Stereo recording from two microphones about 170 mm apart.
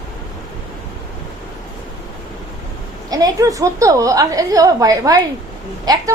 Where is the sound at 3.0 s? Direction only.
20° right (ahead or behind).